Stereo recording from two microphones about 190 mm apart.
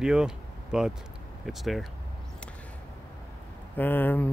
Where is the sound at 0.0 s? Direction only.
5° right (ahead or behind).